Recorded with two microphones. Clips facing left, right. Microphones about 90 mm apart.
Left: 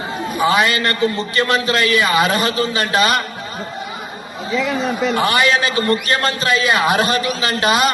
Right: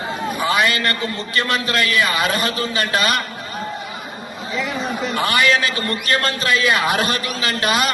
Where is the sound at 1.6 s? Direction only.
15° left (ahead or behind).